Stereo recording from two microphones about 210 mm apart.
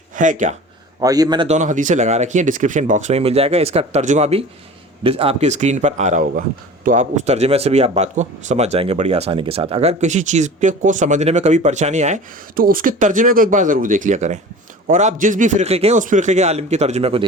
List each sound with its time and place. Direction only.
0.2 s speech: 35° right (ahead or behind)
1.0 s a man's voice: 15° right (ahead or behind)
1.5 s speech: 35° right (ahead or behind)